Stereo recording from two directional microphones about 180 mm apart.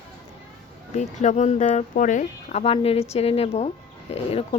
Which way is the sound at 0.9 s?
40° left (ahead or behind).